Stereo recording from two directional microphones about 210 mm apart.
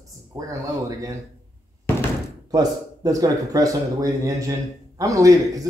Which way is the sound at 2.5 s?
15° right (ahead or behind).